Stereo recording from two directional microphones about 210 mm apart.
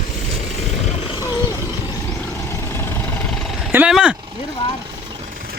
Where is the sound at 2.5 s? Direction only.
10° left (ahead or behind); by 4.1 s 5° right (ahead or behind).